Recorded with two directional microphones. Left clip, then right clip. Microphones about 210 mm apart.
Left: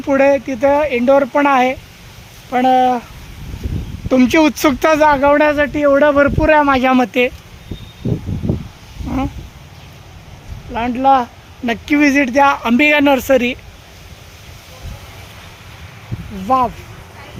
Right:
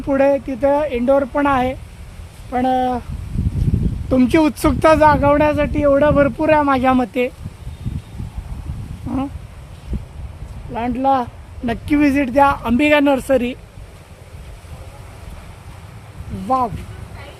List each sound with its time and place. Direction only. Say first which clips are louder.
0.1 s speech: left 3 dB; 10° left (ahead or behind)
4.1 s speech: left 3 dB; 5° left (ahead or behind)
9.0 s cat: left 3 dB; 5° left (ahead or behind)
10.8 s speech: left 4 dB; 5° left (ahead or behind)
16.5 s speech: left 4 dB; 15° left (ahead or behind)